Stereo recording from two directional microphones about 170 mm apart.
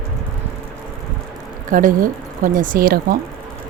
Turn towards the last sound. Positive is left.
turn(degrees=-60)  # may be behind; listen again after turning